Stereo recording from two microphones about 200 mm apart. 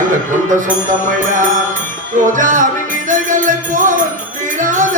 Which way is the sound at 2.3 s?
40° right (ahead or behind).